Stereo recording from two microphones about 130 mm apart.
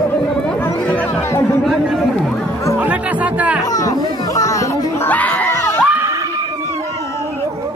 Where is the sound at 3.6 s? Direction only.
25° left (ahead or behind).